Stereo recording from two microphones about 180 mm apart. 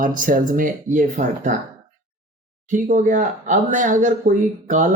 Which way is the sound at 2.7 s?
45° right (ahead or behind).